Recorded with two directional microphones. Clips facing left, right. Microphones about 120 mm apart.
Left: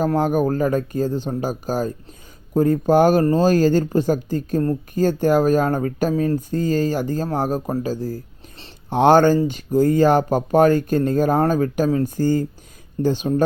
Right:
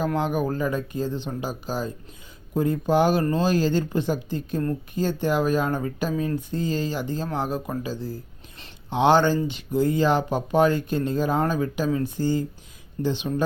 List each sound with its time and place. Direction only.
0.0 s speech: 45° left (ahead or behind)